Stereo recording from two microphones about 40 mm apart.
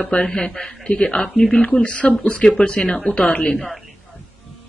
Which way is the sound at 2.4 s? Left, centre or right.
Centre.